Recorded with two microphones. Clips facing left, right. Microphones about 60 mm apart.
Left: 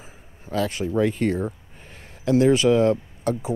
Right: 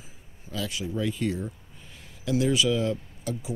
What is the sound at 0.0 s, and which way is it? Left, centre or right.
Speech, left.